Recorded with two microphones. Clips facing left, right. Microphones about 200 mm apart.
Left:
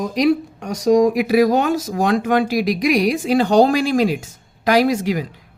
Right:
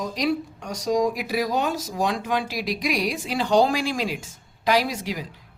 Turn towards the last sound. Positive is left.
turn(degrees=55)  # may be behind; listen again after turning